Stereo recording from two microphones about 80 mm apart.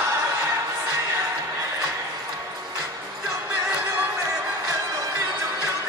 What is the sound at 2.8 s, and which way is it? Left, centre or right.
Music, right.